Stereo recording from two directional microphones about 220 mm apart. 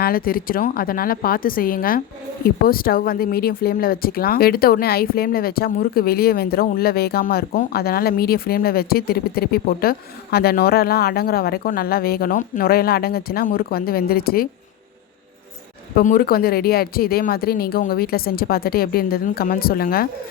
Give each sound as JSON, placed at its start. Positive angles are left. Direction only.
{"t": 0.0, "sound": "a woman's voice", "side_deg": 40}
{"t": 16.0, "sound": "speech", "side_deg": 40}